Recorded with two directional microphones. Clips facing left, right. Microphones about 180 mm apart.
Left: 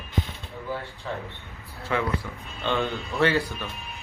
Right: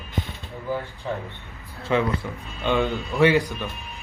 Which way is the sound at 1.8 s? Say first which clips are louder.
Right 4 dB; 20° right (ahead or behind).